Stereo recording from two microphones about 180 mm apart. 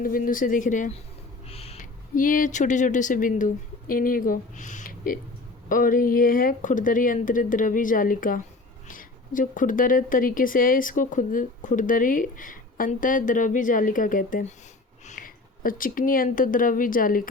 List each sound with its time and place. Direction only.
0.0 s speech: 50° left (ahead or behind)
1.5 s a sound: 35° left (ahead or behind)
2.1 s speech: 50° left (ahead or behind)